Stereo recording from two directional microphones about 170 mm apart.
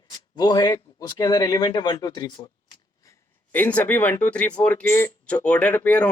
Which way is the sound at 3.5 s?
10° left (ahead or behind).